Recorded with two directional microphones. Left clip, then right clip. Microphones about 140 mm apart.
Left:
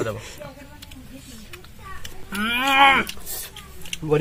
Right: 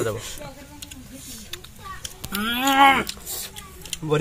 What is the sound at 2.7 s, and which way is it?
Speech, 40° right (ahead or behind).